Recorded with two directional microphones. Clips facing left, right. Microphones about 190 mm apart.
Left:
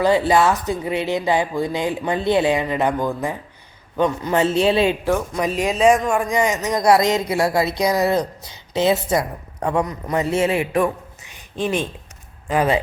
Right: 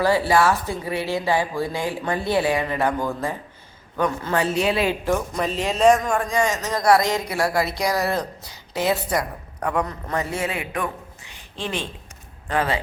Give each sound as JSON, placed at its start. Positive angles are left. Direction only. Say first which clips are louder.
{"t": 0.0, "sound": "a man's voice", "louder": "left 2 dB", "side_deg": 20}
{"t": 5.0, "sound": "a man's voice", "louder": "left 2 dB", "side_deg": 5}